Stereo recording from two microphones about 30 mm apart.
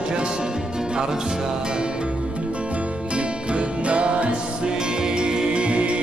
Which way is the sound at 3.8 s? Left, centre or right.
Right.